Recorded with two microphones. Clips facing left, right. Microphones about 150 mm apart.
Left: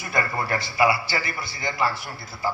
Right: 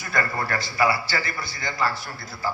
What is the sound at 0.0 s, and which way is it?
A man's voice, 20° left (ahead or behind).